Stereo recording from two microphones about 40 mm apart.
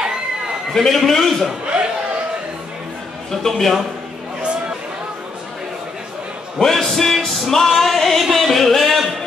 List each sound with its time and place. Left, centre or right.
0.7 s a man's voice: centre
3.3 s a man's voice: centre
4.4 s a sound: right
6.6 s music: centre